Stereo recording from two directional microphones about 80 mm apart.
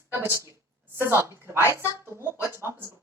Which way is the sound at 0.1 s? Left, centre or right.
Right.